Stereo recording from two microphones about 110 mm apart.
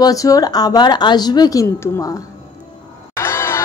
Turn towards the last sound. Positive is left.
turn(degrees=25)  # may be behind; listen again after turning